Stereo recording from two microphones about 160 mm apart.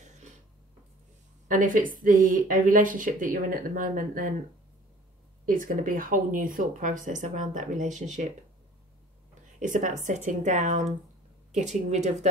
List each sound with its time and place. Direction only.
1.5 s speech: 55° right (ahead or behind)
5.4 s speech: 60° right (ahead or behind)
9.6 s speech: 55° right (ahead or behind)